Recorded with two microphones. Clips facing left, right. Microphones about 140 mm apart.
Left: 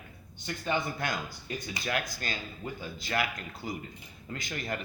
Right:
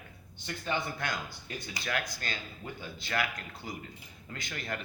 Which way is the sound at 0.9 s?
25° left (ahead or behind).